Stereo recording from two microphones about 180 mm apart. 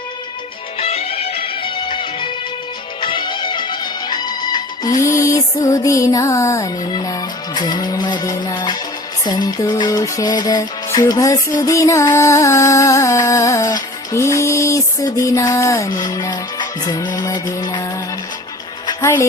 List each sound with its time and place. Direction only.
0.8 s music: 35° left (ahead or behind)
18.9 s music: 15° left (ahead or behind)